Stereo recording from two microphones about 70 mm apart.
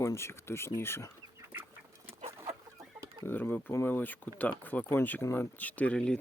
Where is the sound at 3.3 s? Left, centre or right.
Left.